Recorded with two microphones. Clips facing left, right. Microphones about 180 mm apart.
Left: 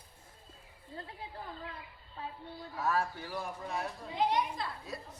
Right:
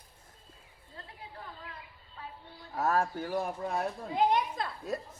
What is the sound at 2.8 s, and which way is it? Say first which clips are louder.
Speech: right 4 dB; 45° right (ahead or behind).